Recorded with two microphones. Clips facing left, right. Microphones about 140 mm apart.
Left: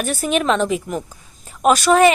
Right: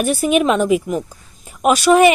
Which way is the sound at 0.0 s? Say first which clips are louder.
Right 4 dB; 10° right (ahead or behind).